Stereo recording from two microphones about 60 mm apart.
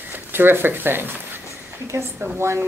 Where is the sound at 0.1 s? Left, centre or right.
Right.